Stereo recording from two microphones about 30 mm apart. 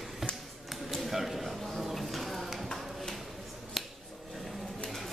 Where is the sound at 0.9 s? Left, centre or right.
Centre.